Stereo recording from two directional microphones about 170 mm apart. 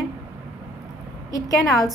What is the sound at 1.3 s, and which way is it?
Speech, 20° left (ahead or behind).